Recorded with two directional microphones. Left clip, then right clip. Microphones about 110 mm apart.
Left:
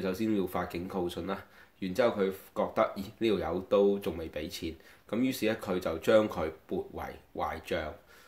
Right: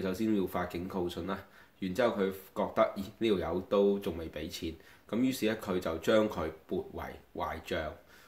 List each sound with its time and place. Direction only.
0.0 s speech: 30° left (ahead or behind)